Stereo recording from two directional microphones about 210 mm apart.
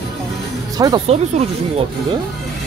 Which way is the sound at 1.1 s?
30° right (ahead or behind).